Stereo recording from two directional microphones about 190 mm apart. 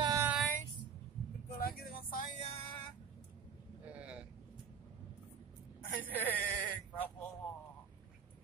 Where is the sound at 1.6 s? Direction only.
50° left (ahead or behind).